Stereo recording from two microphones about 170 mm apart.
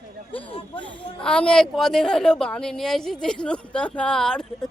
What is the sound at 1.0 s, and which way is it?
Speech, 30° left (ahead or behind).